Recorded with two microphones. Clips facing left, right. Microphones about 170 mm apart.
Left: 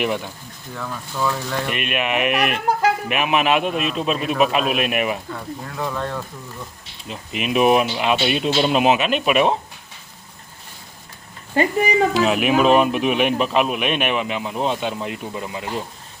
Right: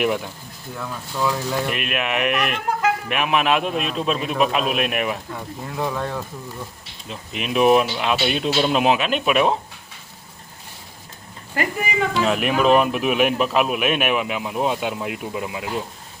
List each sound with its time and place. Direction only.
0.0 s speech: centre (ahead or behind)
5.3 s speech: 10° right (ahead or behind)
7.1 s speech: 5° left (ahead or behind)
11.5 s speech: 30° left (ahead or behind)
12.1 s speech: 5° left (ahead or behind)